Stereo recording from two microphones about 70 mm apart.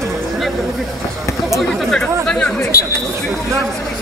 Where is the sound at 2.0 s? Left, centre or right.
Centre.